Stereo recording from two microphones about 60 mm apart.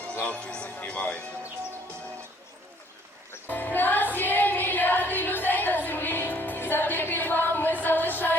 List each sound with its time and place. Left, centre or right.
0.1 s music: left
0.9 s speech: centre
3.5 s music: left